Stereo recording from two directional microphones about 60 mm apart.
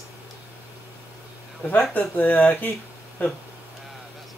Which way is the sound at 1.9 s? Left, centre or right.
Left.